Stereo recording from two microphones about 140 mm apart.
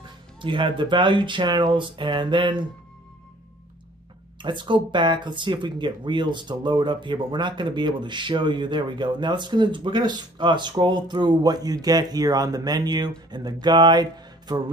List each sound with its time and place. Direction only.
0.4 s speech: 35° right (ahead or behind)
4.4 s speech: 35° right (ahead or behind)